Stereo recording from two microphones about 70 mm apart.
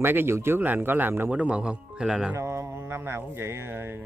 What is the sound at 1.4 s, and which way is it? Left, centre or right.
Speech, centre.